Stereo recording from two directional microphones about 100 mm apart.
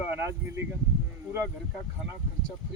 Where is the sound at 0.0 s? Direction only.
20° right (ahead or behind).